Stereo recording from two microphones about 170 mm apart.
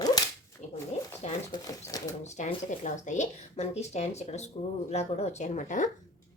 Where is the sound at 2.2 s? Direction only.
45° left (ahead or behind).